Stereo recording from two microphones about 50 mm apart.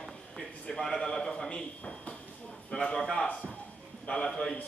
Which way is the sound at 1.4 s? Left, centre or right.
Left.